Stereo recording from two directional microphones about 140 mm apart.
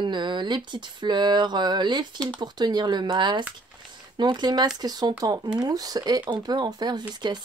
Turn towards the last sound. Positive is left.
turn(degrees=-30)  # may be behind; listen again after turning